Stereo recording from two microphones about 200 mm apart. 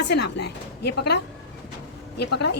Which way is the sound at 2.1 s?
55° left (ahead or behind).